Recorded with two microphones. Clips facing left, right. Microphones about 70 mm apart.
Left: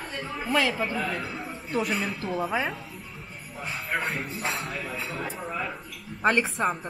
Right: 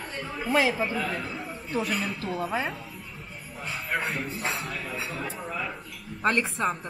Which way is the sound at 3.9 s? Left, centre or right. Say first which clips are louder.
Even; centre.